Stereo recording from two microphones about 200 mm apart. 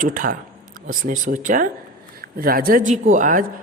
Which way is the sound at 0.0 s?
45° right (ahead or behind).